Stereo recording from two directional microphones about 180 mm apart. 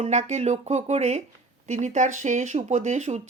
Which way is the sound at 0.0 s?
40° right (ahead or behind).